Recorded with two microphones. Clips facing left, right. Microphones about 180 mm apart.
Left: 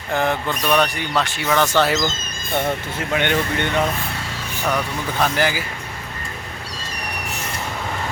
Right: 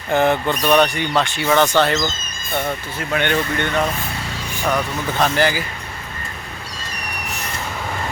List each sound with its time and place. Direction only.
0.1 s speech: centre (ahead or behind)
3.2 s speech: 15° left (ahead or behind)
4.6 s speech: 10° right (ahead or behind)
5.1 s speech: 10° left (ahead or behind)